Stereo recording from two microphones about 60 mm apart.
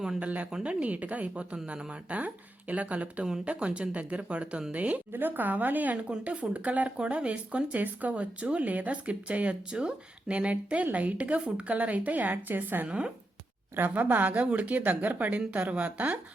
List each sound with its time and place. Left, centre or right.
0.2 s speech: right